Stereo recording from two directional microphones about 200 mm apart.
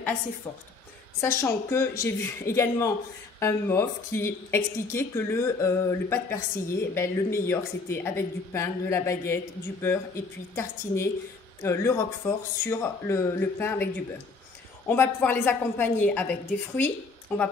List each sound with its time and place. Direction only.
1.2 s a woman's voice: 15° left (ahead or behind)
14.9 s a woman's voice: 10° left (ahead or behind)